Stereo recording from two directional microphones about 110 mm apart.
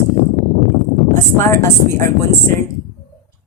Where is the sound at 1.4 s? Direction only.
25° left (ahead or behind).